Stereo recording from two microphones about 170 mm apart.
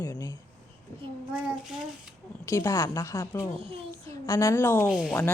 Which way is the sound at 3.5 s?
35° right (ahead or behind).